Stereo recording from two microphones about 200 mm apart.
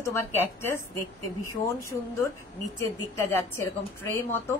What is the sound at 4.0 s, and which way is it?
Speech, 10° left (ahead or behind).